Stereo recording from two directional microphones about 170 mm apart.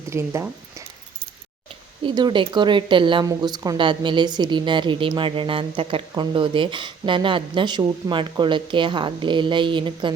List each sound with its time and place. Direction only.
0.1 s speech: 15° right (ahead or behind)
2.0 s a woman's voice: 25° right (ahead or behind)